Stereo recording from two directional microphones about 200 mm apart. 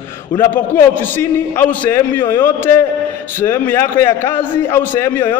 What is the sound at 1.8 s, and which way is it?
A man's voice, 10° left (ahead or behind).